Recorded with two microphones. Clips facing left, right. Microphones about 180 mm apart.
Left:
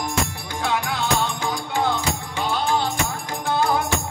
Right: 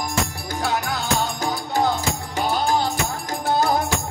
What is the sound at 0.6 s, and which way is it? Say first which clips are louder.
Music: left 1 dB; 40° right (ahead or behind).